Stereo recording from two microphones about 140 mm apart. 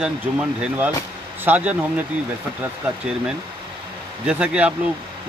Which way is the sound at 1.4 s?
10° right (ahead or behind).